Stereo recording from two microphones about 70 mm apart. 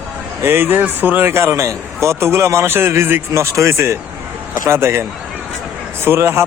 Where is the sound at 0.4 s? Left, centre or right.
Right.